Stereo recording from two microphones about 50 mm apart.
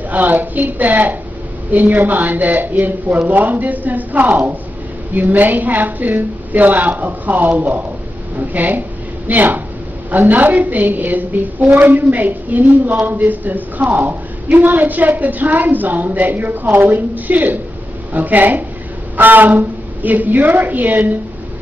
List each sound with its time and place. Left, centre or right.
0.1 s a woman's voice: right